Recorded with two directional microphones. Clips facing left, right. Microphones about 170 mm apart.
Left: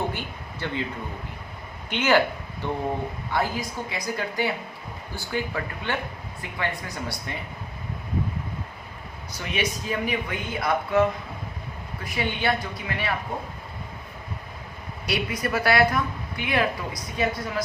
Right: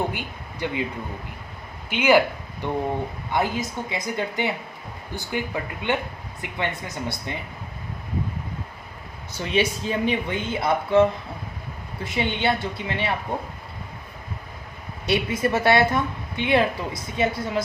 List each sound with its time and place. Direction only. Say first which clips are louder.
0.1 s speech: right 1 dB; 15° right (ahead or behind)
1.9 s a woman's voice: right 3 dB; 10° right (ahead or behind)
9.3 s a woman's voice: right 5 dB; 30° right (ahead or behind)
12.0 s a woman's voice: right 2 dB; 25° right (ahead or behind)
15.0 s a woman's voice: right 5 dB; 25° right (ahead or behind)